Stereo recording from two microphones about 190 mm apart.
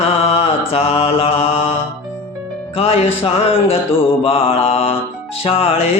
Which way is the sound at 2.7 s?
30° left (ahead or behind).